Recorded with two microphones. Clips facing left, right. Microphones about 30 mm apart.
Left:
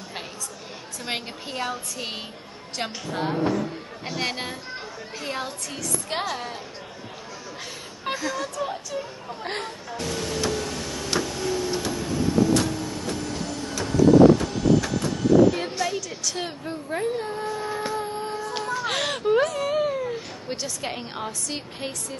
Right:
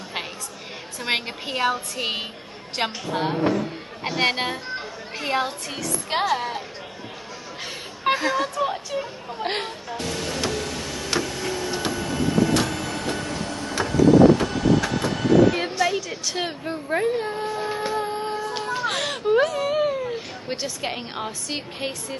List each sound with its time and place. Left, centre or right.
1.0 s a woman's voice: right
8.0 s speech: right
9.8 s printer: centre
12.0 s music: right
12.3 s printer: right
13.0 s train: right
13.3 s train: right
15.8 s a sound: centre
18.9 s speech: centre; by 21.9 s right